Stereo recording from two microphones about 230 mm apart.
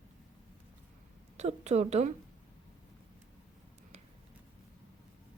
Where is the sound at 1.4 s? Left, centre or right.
Right.